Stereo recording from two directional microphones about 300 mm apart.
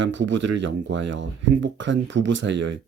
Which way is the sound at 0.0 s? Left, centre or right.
Right.